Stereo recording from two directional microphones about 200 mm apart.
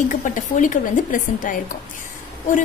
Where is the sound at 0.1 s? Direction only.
40° left (ahead or behind).